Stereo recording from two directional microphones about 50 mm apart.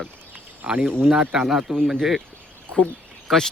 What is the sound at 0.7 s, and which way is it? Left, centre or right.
Speech, right.